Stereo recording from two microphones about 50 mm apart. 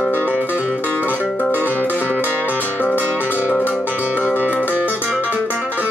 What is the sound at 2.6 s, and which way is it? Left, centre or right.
Music, left.